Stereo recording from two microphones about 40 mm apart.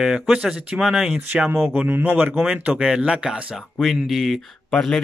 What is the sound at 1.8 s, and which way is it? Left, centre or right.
Speech, right.